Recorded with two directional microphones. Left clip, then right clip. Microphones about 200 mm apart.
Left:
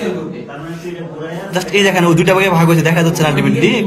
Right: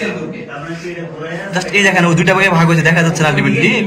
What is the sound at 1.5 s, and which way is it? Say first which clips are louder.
A man's voice: right 1 dB; 15° left (ahead or behind).